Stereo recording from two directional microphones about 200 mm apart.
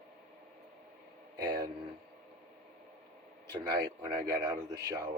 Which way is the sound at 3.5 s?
20° right (ahead or behind).